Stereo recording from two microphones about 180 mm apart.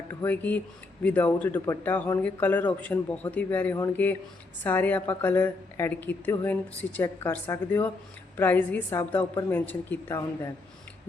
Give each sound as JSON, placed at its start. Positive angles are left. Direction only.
{"t": 0.1, "sound": "a woman's voice", "side_deg": 10}